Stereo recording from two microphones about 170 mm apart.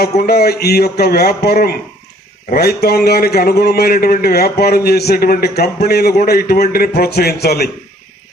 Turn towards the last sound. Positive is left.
turn(degrees=70)  # may be behind; listen again after turning